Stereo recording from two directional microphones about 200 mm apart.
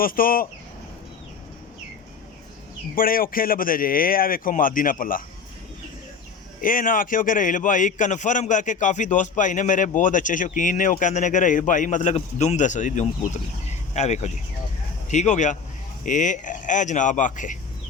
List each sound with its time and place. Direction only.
0.0 s a man's voice: 45° left (ahead or behind)
2.9 s a man's voice: 45° left (ahead or behind)
6.6 s speech: 45° left (ahead or behind)